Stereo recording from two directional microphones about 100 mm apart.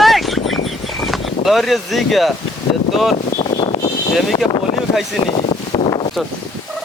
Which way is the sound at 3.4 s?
65° left (ahead or behind).